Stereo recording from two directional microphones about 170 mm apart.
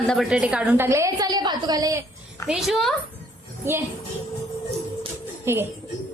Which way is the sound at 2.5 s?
Centre (ahead or behind).